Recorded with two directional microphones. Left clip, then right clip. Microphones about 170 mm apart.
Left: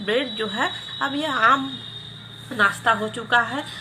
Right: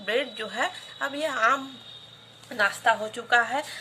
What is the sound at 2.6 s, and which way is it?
Speech, 25° right (ahead or behind).